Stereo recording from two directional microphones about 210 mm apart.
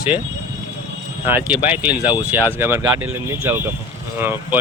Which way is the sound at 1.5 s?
5° right (ahead or behind).